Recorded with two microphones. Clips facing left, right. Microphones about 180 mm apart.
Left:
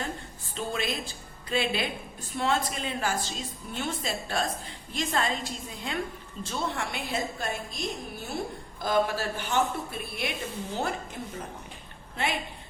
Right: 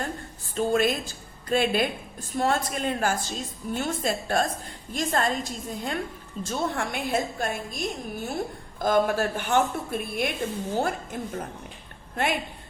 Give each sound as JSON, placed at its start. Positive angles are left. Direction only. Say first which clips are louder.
{"t": 0.5, "sound": "a woman's voice", "louder": "right 8 dB", "side_deg": -50}